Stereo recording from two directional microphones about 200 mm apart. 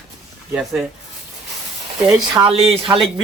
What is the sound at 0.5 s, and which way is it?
Speech, 5° right (ahead or behind).